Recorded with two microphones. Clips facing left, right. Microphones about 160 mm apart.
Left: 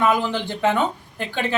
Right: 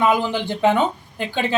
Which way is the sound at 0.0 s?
15° right (ahead or behind).